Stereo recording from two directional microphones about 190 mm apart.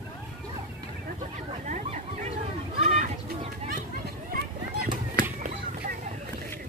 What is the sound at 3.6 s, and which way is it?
Chop, 50° right (ahead or behind).